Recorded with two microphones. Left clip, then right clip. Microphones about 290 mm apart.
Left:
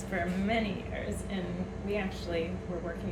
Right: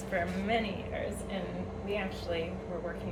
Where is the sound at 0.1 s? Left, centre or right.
Centre.